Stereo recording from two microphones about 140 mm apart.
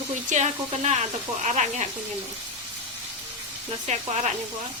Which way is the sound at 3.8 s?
55° right (ahead or behind).